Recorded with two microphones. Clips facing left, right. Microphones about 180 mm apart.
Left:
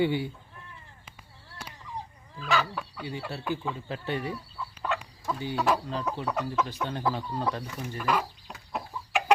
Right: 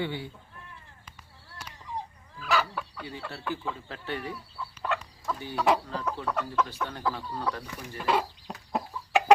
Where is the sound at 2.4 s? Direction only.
Centre (ahead or behind).